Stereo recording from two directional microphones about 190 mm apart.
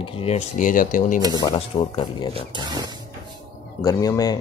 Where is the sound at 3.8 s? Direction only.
20° left (ahead or behind).